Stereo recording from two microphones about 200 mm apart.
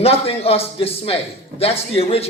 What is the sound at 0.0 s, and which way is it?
A man's voice, 30° left (ahead or behind).